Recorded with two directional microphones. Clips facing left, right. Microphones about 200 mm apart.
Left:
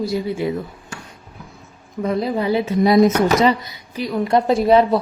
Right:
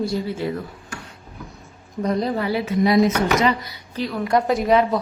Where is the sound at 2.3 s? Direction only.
20° left (ahead or behind).